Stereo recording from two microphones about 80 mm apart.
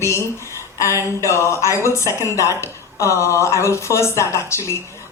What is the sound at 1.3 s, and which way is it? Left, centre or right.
Speech, left.